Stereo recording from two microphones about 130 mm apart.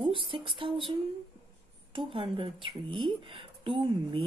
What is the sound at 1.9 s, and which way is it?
Speech, 40° right (ahead or behind).